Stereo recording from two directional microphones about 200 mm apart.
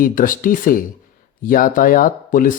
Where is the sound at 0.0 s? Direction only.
40° left (ahead or behind).